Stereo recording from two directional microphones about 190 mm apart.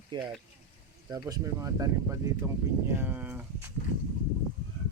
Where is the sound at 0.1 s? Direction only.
20° right (ahead or behind).